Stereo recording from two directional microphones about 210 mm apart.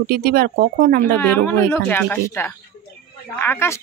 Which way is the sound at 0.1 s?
50° right (ahead or behind).